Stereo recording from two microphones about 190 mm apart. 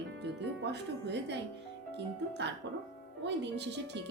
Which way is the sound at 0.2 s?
65° right (ahead or behind).